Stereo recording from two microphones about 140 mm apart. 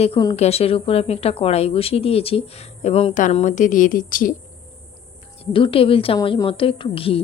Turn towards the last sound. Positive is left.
turn(degrees=40)  # may be behind; listen again after turning